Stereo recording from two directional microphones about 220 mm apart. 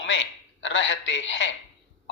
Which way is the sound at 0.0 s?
55° left (ahead or behind).